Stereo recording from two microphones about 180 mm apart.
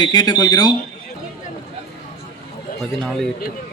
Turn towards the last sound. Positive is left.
turn(degrees=0)  # may be behind; listen again after turning